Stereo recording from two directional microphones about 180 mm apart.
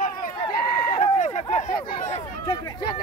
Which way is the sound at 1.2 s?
40° left (ahead or behind).